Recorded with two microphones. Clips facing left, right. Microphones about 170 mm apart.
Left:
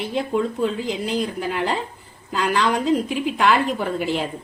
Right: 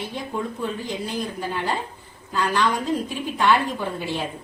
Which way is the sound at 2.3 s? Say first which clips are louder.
Left 2 dB; 90° left.